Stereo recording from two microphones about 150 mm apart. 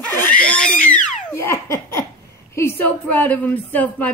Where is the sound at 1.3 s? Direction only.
15° left (ahead or behind).